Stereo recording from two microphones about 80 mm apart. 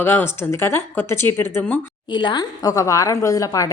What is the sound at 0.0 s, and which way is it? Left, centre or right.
Speech, left.